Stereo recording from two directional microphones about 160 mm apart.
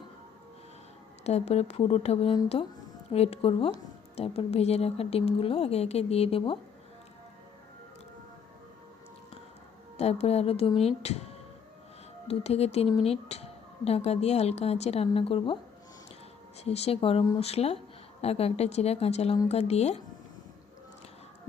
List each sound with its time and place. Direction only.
1.2 s speech: 40° left (ahead or behind)
10.0 s speech: 40° left (ahead or behind)
16.6 s speech: 40° left (ahead or behind)